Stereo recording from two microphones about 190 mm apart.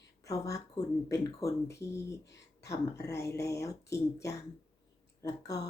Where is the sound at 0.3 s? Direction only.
15° left (ahead or behind).